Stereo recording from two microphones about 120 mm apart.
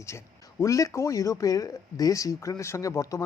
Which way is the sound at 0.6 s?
25° left (ahead or behind).